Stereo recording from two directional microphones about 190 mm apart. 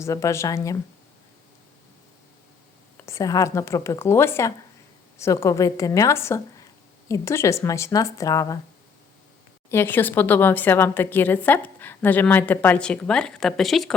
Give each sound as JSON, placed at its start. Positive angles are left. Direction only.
{"t": 0.0, "sound": "a woman's voice", "side_deg": 15}
{"t": 3.1, "sound": "a woman's voice", "side_deg": 15}
{"t": 9.6, "sound": "a woman's voice", "side_deg": 10}